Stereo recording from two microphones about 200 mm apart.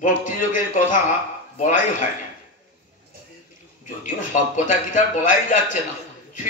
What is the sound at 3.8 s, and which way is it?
A man's voice, 40° left (ahead or behind).